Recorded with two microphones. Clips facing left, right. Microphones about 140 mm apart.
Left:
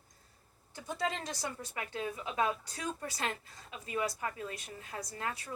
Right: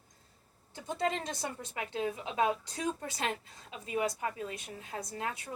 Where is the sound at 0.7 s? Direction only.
25° right (ahead or behind).